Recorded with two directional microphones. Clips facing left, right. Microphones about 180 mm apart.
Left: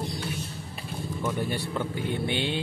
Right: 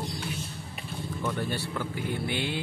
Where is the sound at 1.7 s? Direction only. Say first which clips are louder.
Left 2 dB; 25° left (ahead or behind).